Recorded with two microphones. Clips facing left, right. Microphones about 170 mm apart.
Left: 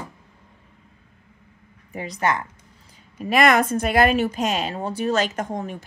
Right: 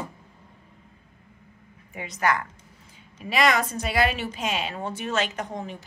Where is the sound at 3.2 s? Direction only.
50° left (ahead or behind).